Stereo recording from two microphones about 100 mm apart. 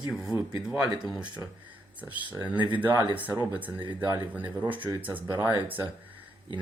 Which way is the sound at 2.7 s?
15° right (ahead or behind).